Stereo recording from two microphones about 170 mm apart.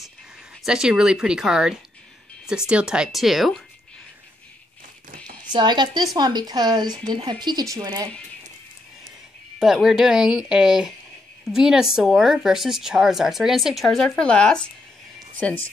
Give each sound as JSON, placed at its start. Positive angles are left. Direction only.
{"t": 0.7, "sound": "a woman's voice", "side_deg": -5}
{"t": 5.4, "sound": "speech", "side_deg": -25}
{"t": 9.6, "sound": "a woman's voice", "side_deg": 0}